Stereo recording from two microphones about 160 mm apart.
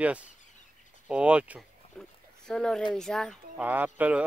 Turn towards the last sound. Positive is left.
turn(degrees=-10)  # may be behind; listen again after turning